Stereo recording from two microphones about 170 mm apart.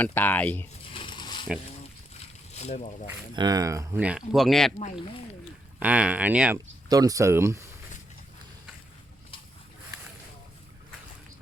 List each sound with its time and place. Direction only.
0.0 s speech: 10° left (ahead or behind)
0.9 s pulleys: 30° left (ahead or behind)
2.1 s boat: 40° left (ahead or behind)
3.3 s speech: 20° right (ahead or behind); by 4.7 s centre (ahead or behind)
5.8 s speech: 10° right (ahead or behind)
6.8 s speech: 20° right (ahead or behind)